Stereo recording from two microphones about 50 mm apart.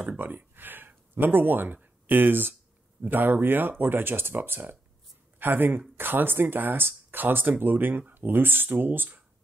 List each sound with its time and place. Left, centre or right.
0.2 s speech: right